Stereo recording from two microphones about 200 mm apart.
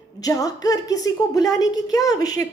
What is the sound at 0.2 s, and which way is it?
Speech, 20° left (ahead or behind).